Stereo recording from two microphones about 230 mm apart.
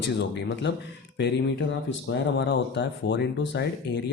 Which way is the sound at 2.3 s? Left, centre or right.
Left.